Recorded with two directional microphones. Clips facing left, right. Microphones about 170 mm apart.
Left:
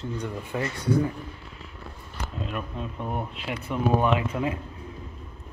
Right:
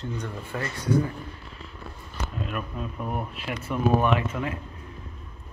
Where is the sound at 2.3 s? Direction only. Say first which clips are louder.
Even; 25° left (ahead or behind).